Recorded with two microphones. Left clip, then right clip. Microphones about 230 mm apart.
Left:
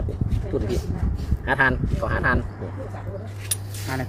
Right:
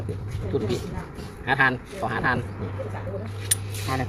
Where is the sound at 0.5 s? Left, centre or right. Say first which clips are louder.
Even; left.